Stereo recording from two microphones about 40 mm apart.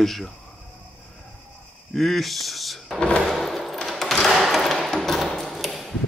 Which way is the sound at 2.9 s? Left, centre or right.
Left.